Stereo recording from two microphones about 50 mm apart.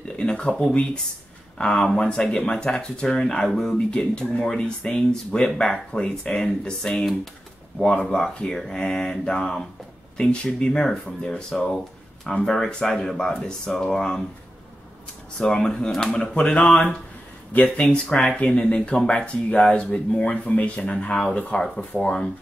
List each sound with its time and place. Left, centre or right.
0.1 s a sound: centre
1.6 s speech: centre
10.1 s speech: centre
11.5 s speech: centre
15.3 s speech: centre
17.5 s speech: left
17.8 s speech: centre
21.9 s speech: centre